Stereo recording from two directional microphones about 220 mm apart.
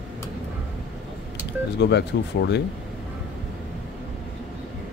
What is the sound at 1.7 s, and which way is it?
Speech, 50° left (ahead or behind).